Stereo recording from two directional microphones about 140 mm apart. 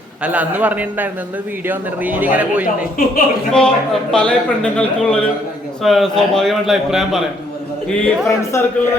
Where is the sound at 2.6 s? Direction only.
90° left.